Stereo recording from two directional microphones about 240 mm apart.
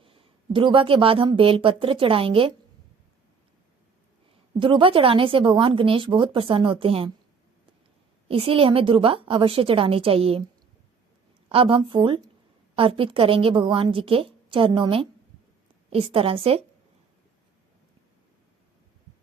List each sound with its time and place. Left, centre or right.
0.0 s speech: right
4.6 s a woman's voice: right
8.3 s a woman's voice: right
11.4 s a woman's voice: right